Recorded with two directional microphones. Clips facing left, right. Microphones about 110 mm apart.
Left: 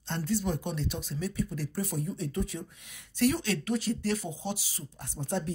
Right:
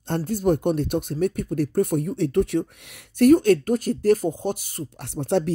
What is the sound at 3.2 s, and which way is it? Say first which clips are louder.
Speech: right 13 dB; 50° right (ahead or behind).